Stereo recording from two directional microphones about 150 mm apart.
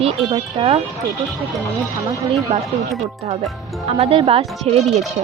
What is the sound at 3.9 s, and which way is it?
Speech, 40° right (ahead or behind).